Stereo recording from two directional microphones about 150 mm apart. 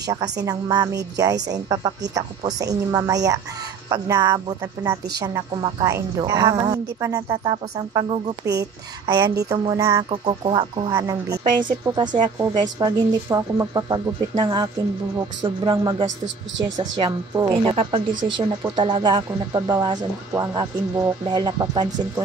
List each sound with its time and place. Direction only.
0.0 s a woman's voice: 25° right (ahead or behind)
10.9 s a woman's voice: 20° right (ahead or behind)
11.4 s a woman's voice: 30° right (ahead or behind)